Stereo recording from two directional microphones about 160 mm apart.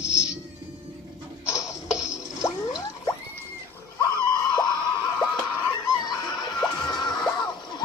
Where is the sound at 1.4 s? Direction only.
20° left (ahead or behind).